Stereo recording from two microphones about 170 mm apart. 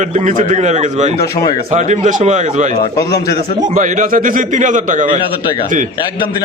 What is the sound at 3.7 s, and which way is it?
A man's voice, 50° right (ahead or behind).